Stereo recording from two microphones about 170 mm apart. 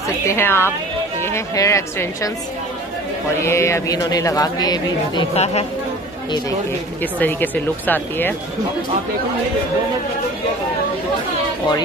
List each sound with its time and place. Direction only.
0.3 s speech: 15° left (ahead or behind)
3.3 s speech: 15° left (ahead or behind)
5.3 s speech: 40° left (ahead or behind)
7.0 s speech: 10° left (ahead or behind)